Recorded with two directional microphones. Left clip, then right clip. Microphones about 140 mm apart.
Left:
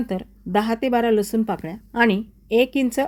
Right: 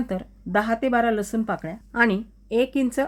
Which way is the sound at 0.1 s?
15° left (ahead or behind).